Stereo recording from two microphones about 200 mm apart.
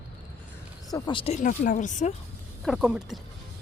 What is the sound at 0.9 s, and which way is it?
Speech, 20° left (ahead or behind).